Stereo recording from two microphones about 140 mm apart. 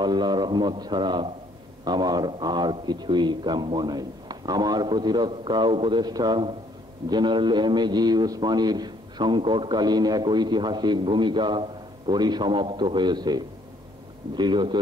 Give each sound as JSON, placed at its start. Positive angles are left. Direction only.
{"t": 0.0, "sound": "a man's voice", "side_deg": -30}